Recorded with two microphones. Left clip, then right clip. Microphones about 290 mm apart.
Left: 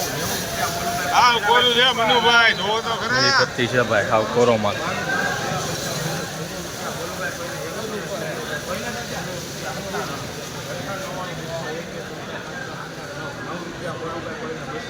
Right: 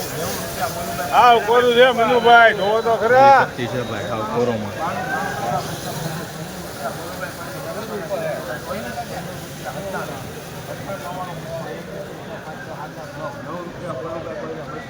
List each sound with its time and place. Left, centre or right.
1.1 s speech: right
3.6 s speech: centre